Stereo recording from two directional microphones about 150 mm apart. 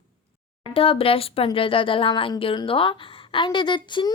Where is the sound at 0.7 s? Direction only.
40° left (ahead or behind).